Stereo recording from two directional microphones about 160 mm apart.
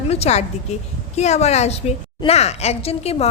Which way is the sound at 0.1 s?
40° left (ahead or behind).